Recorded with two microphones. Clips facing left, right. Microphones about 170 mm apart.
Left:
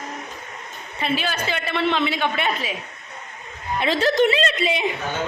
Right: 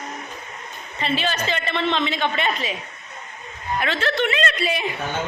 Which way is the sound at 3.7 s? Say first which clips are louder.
Left 4 dB; 35° left (ahead or behind).